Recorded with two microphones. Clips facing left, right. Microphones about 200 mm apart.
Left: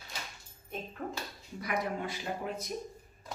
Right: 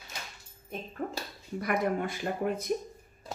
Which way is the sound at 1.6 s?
55° right (ahead or behind).